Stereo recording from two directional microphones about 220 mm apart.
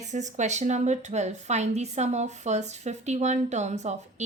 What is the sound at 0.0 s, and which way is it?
A woman's voice, 30° right (ahead or behind).